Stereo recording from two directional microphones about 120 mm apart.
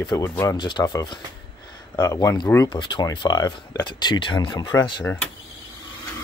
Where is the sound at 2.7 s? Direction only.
40° left (ahead or behind).